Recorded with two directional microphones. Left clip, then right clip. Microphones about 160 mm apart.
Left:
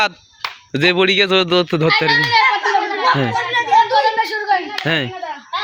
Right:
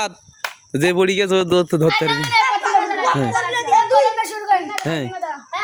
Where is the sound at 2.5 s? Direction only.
20° right (ahead or behind).